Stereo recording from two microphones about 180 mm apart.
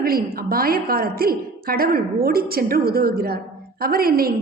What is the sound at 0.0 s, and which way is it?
A woman's voice, 55° right (ahead or behind).